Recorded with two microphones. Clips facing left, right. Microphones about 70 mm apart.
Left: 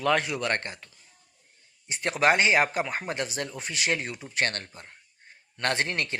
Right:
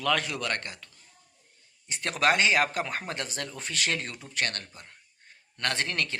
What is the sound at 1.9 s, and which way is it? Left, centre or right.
Speech, left.